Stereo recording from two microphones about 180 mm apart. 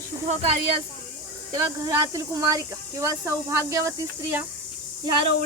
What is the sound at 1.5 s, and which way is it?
Speech, 20° right (ahead or behind).